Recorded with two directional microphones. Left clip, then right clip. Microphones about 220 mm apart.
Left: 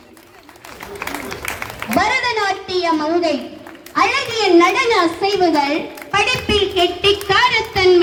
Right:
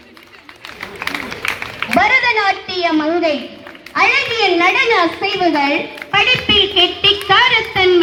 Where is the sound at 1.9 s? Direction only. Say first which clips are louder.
Right 4 dB; 30° right (ahead or behind).